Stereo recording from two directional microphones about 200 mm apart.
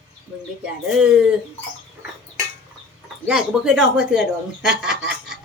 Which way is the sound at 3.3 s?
5° right (ahead or behind).